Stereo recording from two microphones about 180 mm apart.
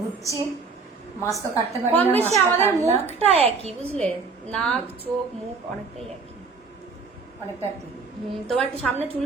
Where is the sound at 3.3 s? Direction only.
35° right (ahead or behind).